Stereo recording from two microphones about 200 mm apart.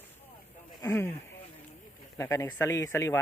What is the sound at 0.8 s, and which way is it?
Speech, 15° left (ahead or behind).